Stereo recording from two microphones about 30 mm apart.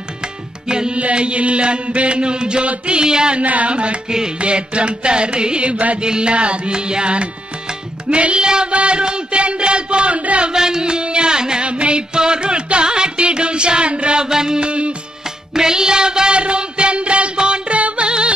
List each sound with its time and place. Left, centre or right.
0.7 s music: right
0.9 s speech: right
2.9 s music: right
3.3 s carnatic music: right
3.7 s speech: right
8.5 s music: right
8.7 s speech: right
10.5 s music: right
11.6 s music: right
14.3 s music: right
14.6 s speech: right
15.5 s music: right
17.7 s music: right
18.0 s music: right